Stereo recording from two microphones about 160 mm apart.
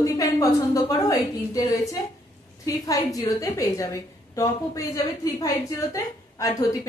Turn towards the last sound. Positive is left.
turn(degrees=20)  # may be behind; listen again after turning